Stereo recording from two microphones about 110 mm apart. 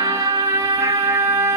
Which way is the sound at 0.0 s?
30° right (ahead or behind).